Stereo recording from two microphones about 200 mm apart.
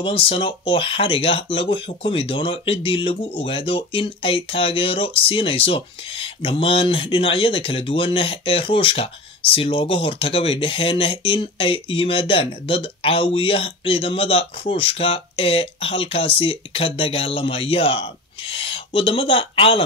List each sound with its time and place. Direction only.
0.0 s speech: 30° left (ahead or behind)